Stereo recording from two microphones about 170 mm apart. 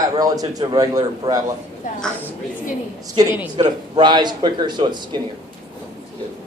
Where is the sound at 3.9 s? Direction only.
25° right (ahead or behind).